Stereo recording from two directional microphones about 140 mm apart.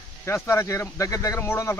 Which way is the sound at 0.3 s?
20° left (ahead or behind).